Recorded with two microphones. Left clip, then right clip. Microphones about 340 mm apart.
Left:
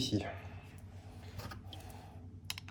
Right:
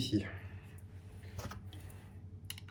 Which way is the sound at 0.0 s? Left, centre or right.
Centre.